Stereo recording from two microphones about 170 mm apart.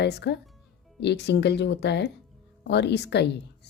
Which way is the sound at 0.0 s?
75° left (ahead or behind).